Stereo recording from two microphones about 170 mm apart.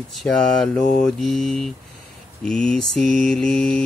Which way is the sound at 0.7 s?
45° left (ahead or behind).